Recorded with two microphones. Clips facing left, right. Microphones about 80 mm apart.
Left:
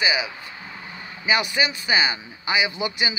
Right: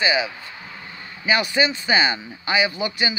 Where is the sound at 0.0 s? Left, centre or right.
Centre.